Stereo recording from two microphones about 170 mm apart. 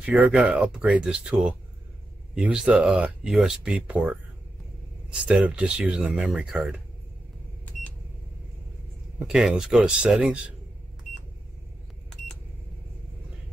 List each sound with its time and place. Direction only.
0.0 s speech: 10° right (ahead or behind)
5.2 s speech: 5° right (ahead or behind)
9.2 s speech: 5° right (ahead or behind)